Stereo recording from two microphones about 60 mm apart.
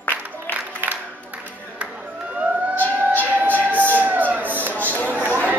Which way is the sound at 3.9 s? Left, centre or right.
Right.